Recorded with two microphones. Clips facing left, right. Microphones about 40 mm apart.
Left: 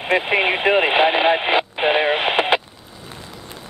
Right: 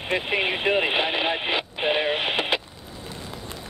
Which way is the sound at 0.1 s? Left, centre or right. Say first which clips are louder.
Left 7 dB; left.